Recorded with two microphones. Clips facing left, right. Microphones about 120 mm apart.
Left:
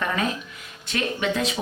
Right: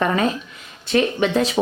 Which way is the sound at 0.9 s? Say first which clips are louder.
Right 7 dB; 35° right (ahead or behind).